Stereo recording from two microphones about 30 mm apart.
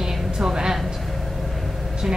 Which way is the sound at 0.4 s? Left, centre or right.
Centre.